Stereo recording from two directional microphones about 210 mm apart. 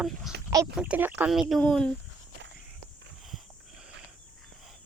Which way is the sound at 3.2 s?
Centre (ahead or behind).